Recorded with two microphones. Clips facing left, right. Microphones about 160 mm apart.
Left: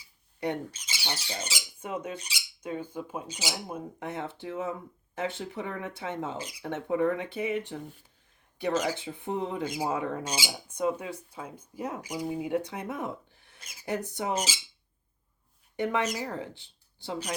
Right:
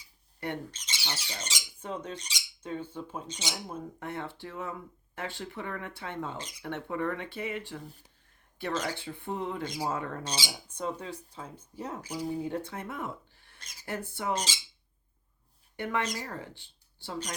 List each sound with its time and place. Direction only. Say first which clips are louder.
0.3 s speech: left 4 dB; 10° left (ahead or behind)
14.3 s speech: left 3 dB; 5° left (ahead or behind)
15.7 s speech: left 4 dB; 15° left (ahead or behind)